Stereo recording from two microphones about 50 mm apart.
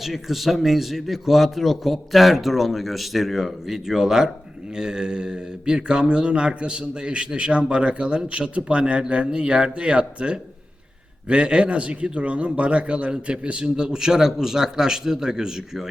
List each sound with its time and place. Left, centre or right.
0.0 s a man's voice: centre